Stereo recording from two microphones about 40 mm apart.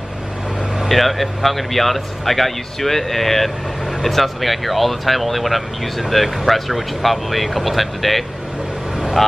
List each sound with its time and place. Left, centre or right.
0.8 s speech: centre